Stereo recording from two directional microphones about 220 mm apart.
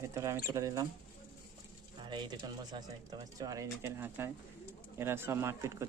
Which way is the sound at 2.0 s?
20° right (ahead or behind).